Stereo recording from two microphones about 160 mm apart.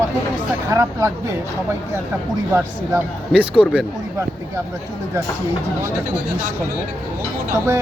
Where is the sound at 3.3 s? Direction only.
10° right (ahead or behind).